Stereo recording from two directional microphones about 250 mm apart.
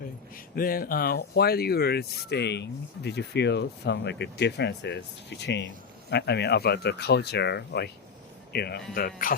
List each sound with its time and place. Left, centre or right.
0.3 s speech: left